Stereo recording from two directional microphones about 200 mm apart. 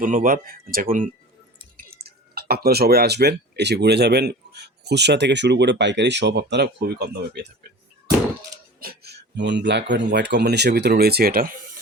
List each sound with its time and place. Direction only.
0.0 s speech: 40° right (ahead or behind)
8.8 s speech: 50° right (ahead or behind)